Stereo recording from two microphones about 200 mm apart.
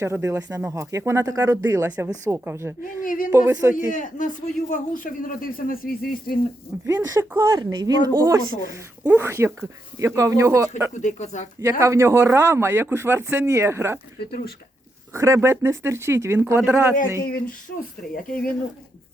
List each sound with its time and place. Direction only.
0.0 s speech: 15° right (ahead or behind)
3.0 s speech: 45° left (ahead or behind)
3.3 s speech: 15° right (ahead or behind)
3.9 s speech: 40° left (ahead or behind)
6.8 s speech: 15° right (ahead or behind)
10.9 s speech: 35° left (ahead or behind)
11.8 s speech: 15° right (ahead or behind)
14.2 s speech: 50° left (ahead or behind)
15.1 s speech: 15° right (ahead or behind)
17.2 s speech: 45° left (ahead or behind)